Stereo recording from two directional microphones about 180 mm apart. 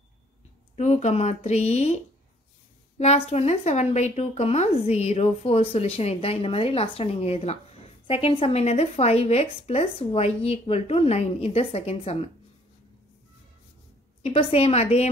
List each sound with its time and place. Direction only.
0.7 s speech: 40° left (ahead or behind)
3.0 s speech: 35° left (ahead or behind)
14.2 s speech: 30° left (ahead or behind)